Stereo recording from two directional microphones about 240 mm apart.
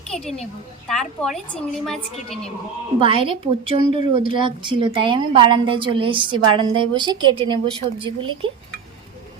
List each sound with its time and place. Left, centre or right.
0.1 s a woman's voice: centre
3.0 s a woman's voice: right